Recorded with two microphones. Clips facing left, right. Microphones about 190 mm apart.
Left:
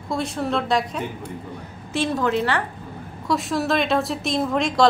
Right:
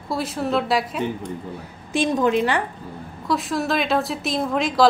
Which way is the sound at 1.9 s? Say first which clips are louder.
Right 3 dB; 15° right (ahead or behind).